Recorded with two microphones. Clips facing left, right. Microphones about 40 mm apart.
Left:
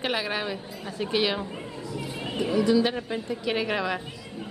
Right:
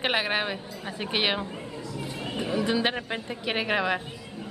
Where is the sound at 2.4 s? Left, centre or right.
Centre.